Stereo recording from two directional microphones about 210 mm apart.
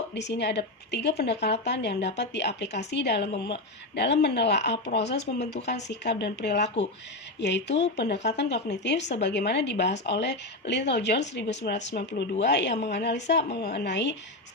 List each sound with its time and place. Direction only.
0.1 s speech: 55° left (ahead or behind)